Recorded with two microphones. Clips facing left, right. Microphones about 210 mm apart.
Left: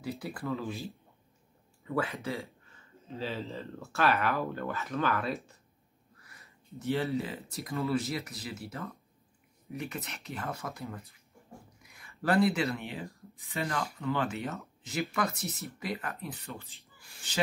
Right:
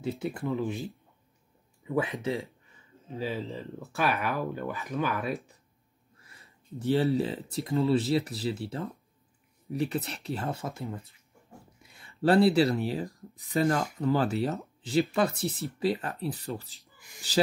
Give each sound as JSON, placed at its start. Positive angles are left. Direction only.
{"t": 0.0, "sound": "speech", "side_deg": -25}
{"t": 6.1, "sound": "speech", "side_deg": -30}